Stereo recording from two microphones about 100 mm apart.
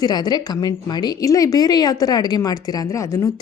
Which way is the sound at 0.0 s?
45° left (ahead or behind).